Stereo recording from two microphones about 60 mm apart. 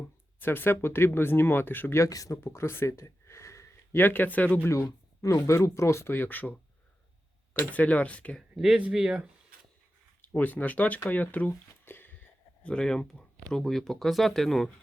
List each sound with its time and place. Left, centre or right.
0.3 s speech: left
2.0 s speech: left
2.3 s speech: left
3.9 s speech: left
4.7 s speech: left
6.1 s speech: left
7.7 s speech: left
8.4 s speech: centre
10.2 s speech: left
12.6 s speech: centre